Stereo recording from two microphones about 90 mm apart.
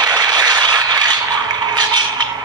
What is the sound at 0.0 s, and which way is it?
Vehicle, 50° right (ahead or behind).